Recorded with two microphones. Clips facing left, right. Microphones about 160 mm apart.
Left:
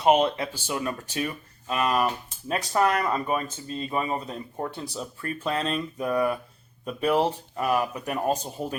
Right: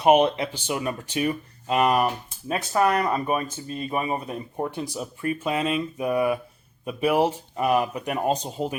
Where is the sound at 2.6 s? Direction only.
5° right (ahead or behind).